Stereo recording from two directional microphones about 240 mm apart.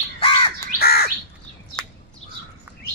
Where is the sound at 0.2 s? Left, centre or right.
Left.